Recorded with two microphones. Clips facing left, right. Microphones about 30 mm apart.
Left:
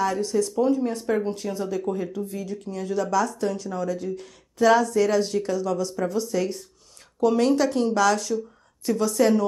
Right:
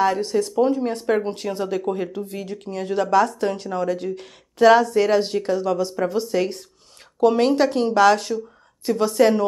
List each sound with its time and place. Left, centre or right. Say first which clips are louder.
0.0 s speech: right 3 dB; right